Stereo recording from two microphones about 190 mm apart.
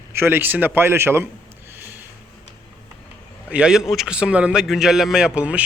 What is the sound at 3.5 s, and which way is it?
Speech, 5° right (ahead or behind).